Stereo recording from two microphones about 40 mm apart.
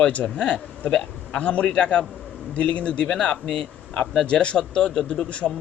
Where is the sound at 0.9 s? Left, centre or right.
Centre.